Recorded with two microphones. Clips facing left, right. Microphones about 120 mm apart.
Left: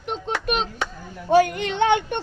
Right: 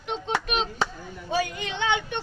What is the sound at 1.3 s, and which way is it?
Speech, 60° left (ahead or behind).